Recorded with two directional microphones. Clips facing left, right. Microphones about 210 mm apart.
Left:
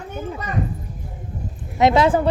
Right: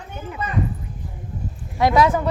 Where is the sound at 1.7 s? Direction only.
25° left (ahead or behind).